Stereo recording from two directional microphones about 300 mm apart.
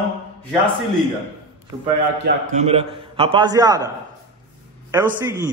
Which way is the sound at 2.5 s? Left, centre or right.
Right.